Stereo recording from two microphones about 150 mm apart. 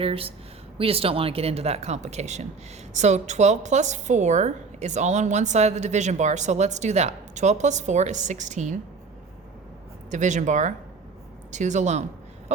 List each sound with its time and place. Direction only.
0.0 s a woman's voice: 40° right (ahead or behind)
10.1 s a woman's voice: 55° right (ahead or behind)
12.5 s a sound: 50° right (ahead or behind)